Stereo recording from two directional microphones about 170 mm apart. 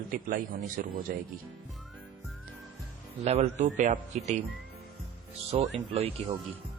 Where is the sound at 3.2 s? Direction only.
40° right (ahead or behind).